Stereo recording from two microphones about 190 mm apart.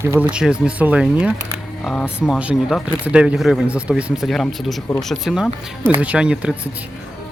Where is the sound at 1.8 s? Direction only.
5° left (ahead or behind).